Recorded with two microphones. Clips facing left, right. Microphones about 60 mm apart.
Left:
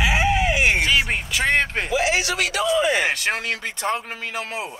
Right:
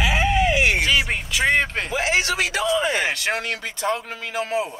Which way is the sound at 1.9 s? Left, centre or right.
Right.